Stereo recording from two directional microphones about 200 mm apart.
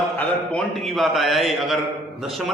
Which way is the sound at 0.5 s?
Centre (ahead or behind).